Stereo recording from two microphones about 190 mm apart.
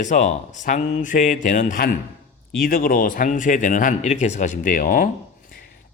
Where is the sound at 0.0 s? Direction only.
40° left (ahead or behind).